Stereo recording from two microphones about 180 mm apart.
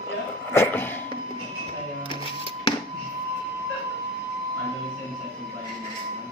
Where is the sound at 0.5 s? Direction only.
10° left (ahead or behind).